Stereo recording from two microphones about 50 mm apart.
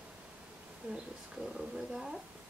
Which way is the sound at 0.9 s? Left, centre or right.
Right.